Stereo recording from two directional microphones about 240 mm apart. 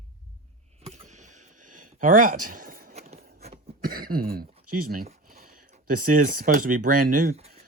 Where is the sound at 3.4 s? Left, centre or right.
Right.